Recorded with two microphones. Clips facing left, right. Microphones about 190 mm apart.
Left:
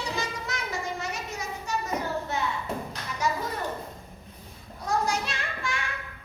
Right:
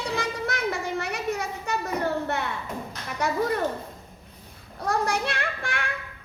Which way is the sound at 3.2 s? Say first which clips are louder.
Right 1 dB; 60° right (ahead or behind).